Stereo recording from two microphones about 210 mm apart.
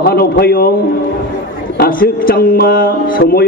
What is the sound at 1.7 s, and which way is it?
A man's voice, 45° left (ahead or behind).